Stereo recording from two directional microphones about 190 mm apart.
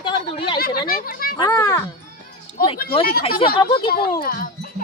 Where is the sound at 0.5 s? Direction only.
50° left (ahead or behind).